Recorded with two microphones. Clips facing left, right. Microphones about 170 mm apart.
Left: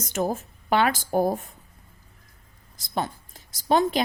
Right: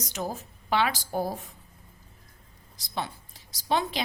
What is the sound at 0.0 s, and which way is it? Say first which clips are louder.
A woman's voice: left 7 dB; 50° left (ahead or behind).